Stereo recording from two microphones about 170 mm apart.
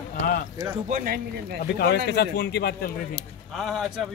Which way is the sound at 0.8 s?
55° right (ahead or behind).